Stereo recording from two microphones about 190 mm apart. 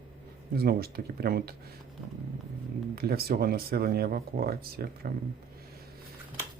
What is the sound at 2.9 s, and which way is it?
Speech, 55° right (ahead or behind).